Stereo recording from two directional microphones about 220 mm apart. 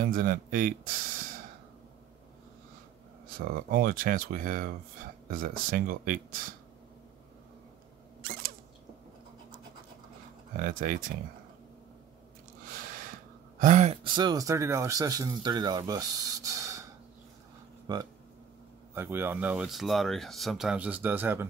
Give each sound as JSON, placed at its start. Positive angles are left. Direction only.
{"t": 0.0, "sound": "speech", "side_deg": -40}
{"t": 3.3, "sound": "speech", "side_deg": -40}
{"t": 8.2, "sound": "mechanisms", "side_deg": -40}
{"t": 10.6, "sound": "speech", "side_deg": -35}
{"t": 12.6, "sound": "a sound", "side_deg": -40}
{"t": 13.6, "sound": "speech", "side_deg": -35}
{"t": 17.9, "sound": "speech", "side_deg": -20}